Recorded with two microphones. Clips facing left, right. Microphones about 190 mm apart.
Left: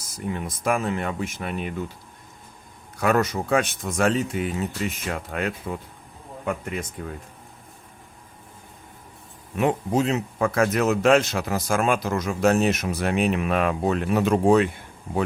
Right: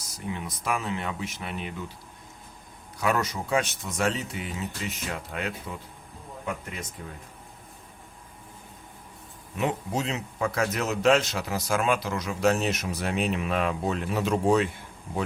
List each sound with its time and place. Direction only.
0.3 s speech: 50° left (ahead or behind)
3.0 s speech: 55° left (ahead or behind)
7.0 s speech: 60° left (ahead or behind)
9.6 s speech: 50° left (ahead or behind)